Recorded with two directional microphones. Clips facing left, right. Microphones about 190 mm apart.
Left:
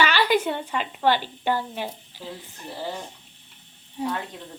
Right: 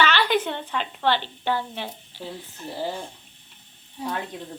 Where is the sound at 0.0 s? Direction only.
10° left (ahead or behind).